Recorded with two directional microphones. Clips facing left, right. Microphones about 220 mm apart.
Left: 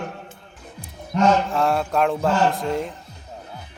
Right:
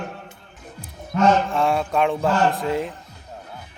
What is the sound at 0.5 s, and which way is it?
Music, centre (ahead or behind).